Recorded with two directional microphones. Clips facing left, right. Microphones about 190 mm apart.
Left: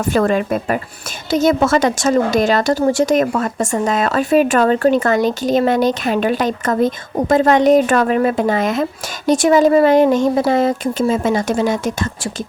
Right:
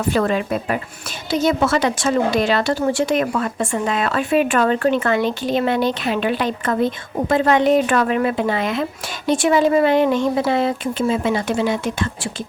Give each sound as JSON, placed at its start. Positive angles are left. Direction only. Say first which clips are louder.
{"t": 0.0, "sound": "a woman's voice", "louder": "left 3 dB", "side_deg": 45}